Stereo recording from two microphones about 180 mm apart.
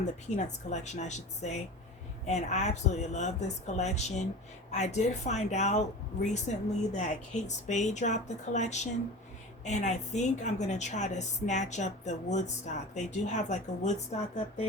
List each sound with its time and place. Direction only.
0.0 s a woman's voice: 40° left (ahead or behind)